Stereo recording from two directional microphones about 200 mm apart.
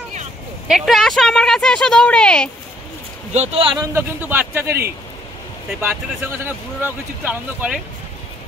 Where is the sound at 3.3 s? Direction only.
30° right (ahead or behind).